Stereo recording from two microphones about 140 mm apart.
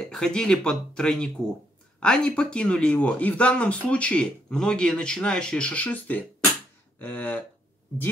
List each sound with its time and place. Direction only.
0.0 s speech: 5° left (ahead or behind)